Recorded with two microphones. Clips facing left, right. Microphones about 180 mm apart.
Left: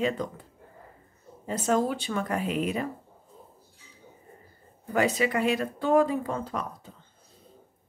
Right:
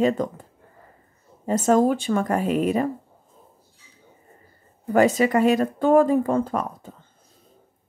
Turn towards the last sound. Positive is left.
turn(degrees=-50)  # may be behind; listen again after turning